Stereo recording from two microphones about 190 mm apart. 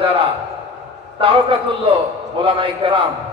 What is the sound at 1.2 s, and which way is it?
A man's voice, 25° right (ahead or behind).